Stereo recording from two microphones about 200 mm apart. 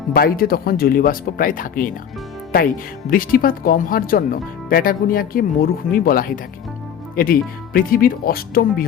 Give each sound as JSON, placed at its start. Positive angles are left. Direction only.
{"t": 0.1, "sound": "speech", "side_deg": 50}
{"t": 3.1, "sound": "speech", "side_deg": 45}